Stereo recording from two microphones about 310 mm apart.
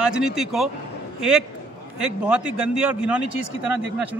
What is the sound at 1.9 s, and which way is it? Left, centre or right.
Speech, centre.